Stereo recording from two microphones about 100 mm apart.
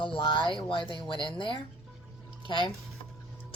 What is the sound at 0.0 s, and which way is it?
Speech, 55° left (ahead or behind).